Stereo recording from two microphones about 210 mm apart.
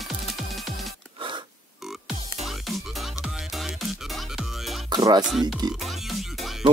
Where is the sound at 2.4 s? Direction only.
Centre (ahead or behind).